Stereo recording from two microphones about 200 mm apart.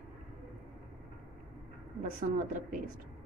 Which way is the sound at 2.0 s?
40° right (ahead or behind).